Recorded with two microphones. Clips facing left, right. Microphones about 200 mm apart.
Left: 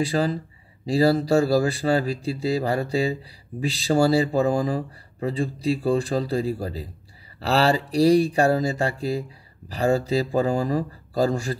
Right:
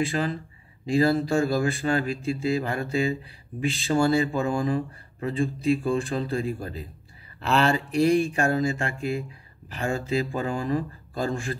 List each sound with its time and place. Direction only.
0.0 s speech: 40° left (ahead or behind)